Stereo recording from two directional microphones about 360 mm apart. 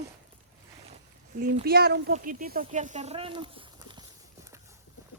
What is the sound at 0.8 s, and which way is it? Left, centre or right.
Speech, right.